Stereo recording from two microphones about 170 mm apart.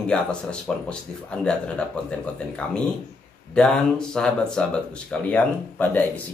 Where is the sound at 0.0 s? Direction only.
5° left (ahead or behind).